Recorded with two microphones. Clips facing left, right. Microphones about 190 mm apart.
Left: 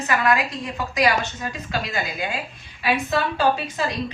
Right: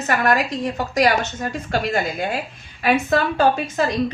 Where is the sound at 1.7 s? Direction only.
60° right (ahead or behind).